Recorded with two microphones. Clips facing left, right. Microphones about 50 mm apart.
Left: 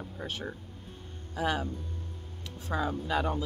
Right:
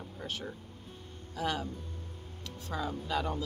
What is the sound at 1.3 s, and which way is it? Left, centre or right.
Speech, centre.